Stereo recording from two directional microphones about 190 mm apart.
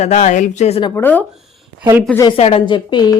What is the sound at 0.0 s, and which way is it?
Speech, 35° left (ahead or behind).